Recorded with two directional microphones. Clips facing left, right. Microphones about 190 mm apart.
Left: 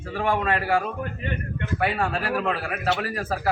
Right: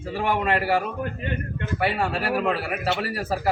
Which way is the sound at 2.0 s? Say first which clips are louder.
Right 1 dB; 10° right (ahead or behind).